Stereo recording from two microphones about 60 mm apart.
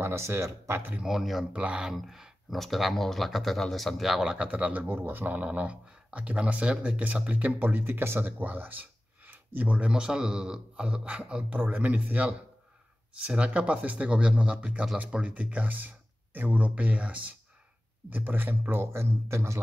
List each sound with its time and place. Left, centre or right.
0.0 s speech: right
1.0 s speech: centre
1.5 s speech: right
2.0 s speech: centre
4.5 s speech: right
4.8 s speech: right; by 11.6 s centre
11.6 s a man's voice: right
18.9 s speech: right